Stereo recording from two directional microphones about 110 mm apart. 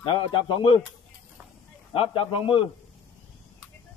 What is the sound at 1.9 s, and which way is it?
Speech, 55° left (ahead or behind).